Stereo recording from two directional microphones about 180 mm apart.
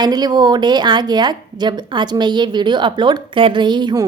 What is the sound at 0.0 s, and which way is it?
A woman's voice, 20° right (ahead or behind).